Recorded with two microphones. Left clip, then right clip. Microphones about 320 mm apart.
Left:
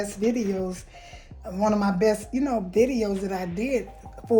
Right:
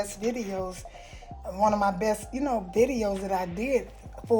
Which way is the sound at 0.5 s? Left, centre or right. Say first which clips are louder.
Left 2 dB; centre.